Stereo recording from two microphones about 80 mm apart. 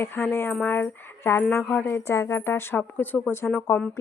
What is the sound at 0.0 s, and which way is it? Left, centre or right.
A woman's voice, left.